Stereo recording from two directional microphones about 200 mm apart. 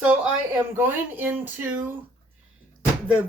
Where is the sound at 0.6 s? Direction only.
10° right (ahead or behind).